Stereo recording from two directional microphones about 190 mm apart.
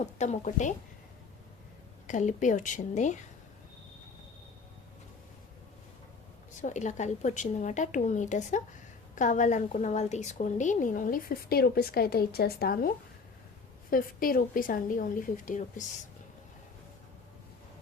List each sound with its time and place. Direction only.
0.0 s a woman's voice: 35° left (ahead or behind)
2.0 s a woman's voice: 40° left (ahead or behind)
6.5 s a woman's voice: 40° left (ahead or behind)
13.9 s a woman's voice: 50° left (ahead or behind)